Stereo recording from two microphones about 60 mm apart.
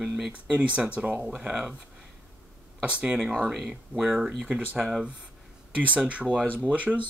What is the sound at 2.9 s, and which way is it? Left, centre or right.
Speech, right.